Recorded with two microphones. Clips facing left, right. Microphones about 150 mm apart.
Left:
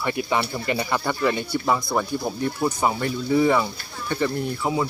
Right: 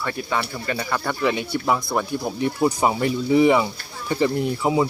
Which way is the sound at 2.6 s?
15° right (ahead or behind).